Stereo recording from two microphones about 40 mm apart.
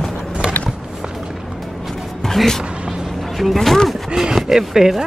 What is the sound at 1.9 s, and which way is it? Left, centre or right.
Music, centre.